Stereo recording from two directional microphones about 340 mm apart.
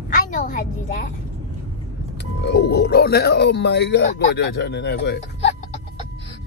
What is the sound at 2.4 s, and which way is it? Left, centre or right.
Speech, left.